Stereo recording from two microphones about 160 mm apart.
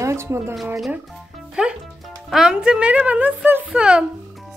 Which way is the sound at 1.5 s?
5° right (ahead or behind).